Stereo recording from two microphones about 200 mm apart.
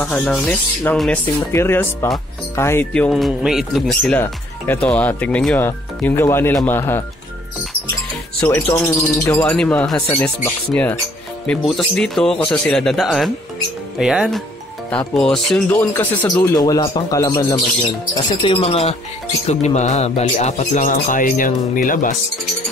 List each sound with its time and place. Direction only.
0.0 s speech: 5° left (ahead or behind)
8.4 s a man's voice: 5° left (ahead or behind); by 22.1 s 40° left (ahead or behind)